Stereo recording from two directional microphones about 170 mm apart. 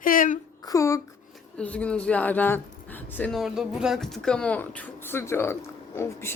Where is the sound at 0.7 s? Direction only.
20° left (ahead or behind).